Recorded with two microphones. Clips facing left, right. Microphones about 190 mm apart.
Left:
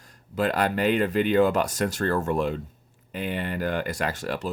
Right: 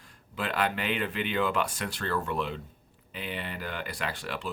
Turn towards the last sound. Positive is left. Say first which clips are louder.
# left 6 dB
turn(degrees=40)  # may be behind; listen again after turning